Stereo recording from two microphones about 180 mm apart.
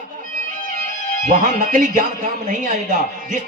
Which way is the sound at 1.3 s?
50° right (ahead or behind).